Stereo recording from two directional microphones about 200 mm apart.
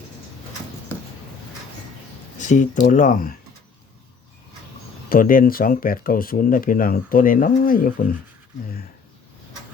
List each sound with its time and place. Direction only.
2.4 s speech: 40° left (ahead or behind)
5.0 s speech: 45° left (ahead or behind)